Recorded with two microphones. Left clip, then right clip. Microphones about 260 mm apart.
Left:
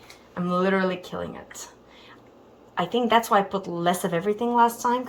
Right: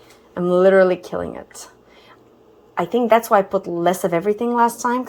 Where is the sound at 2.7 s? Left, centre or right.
Centre.